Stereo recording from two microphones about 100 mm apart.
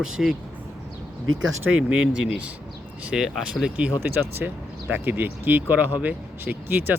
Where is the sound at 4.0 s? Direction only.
20° right (ahead or behind).